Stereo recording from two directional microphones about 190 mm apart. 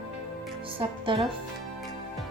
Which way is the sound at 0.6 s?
30° right (ahead or behind).